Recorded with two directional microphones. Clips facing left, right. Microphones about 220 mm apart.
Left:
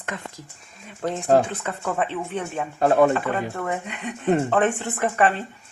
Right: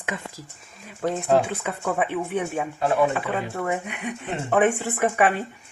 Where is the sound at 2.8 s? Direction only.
50° left (ahead or behind).